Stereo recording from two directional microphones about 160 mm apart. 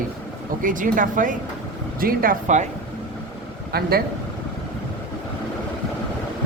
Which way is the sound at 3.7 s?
75° right (ahead or behind).